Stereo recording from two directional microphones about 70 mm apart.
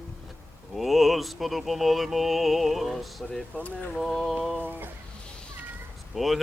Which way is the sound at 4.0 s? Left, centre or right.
Centre.